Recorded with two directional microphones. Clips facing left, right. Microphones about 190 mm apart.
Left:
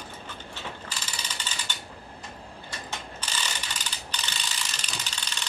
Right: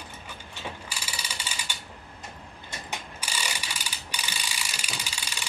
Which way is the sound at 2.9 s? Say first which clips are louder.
Right 1 dB; 10° right (ahead or behind).